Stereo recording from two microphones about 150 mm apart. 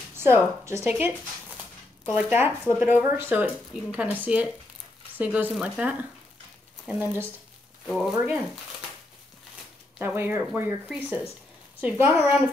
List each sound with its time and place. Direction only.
0.1 s a woman's voice: 15° right (ahead or behind); by 8.1 s centre (ahead or behind)
9.9 s speech: 15° right (ahead or behind)